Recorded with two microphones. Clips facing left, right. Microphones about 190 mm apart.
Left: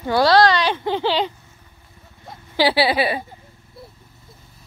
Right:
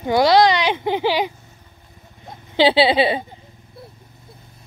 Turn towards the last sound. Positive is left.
turn(degrees=-20)  # may be behind; listen again after turning